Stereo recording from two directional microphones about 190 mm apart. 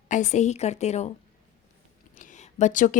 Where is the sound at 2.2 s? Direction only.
40° left (ahead or behind).